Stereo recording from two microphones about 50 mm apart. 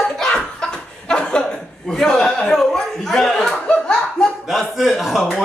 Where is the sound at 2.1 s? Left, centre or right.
Centre.